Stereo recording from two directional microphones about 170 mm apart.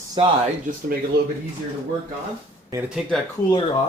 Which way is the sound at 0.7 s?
55° right (ahead or behind).